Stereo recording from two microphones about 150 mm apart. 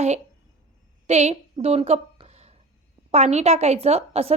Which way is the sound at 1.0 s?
45° right (ahead or behind).